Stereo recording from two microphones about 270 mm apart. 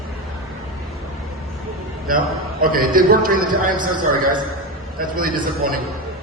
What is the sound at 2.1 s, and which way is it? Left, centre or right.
A man's voice, right.